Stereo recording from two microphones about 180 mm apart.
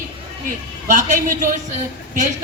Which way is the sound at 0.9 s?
45° right (ahead or behind).